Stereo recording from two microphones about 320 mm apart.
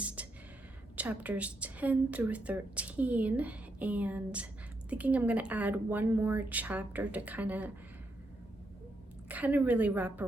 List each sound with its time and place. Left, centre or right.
0.0 s a sound: centre
0.9 s a woman's voice: centre
9.3 s a woman's voice: centre